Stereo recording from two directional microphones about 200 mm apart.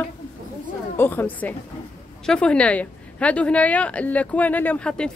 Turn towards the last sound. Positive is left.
turn(degrees=5)  # may be behind; listen again after turning